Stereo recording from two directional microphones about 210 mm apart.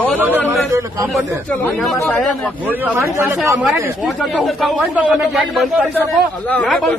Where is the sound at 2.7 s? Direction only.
10° right (ahead or behind).